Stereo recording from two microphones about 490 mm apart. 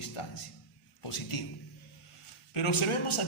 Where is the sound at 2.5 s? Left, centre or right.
Left.